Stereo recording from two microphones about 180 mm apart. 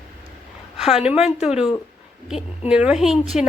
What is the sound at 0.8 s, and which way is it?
A woman's voice, 5° right (ahead or behind).